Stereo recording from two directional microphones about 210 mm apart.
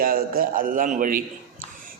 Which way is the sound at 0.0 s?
45° right (ahead or behind).